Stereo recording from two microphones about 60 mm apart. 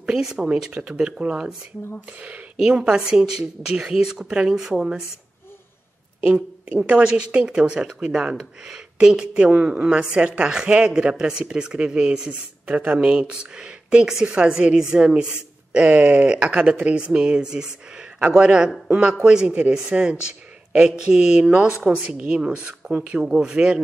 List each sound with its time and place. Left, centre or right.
0.0 s speech: centre
6.2 s speech: centre